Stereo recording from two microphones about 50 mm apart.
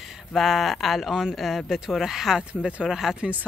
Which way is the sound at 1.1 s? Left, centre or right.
Centre.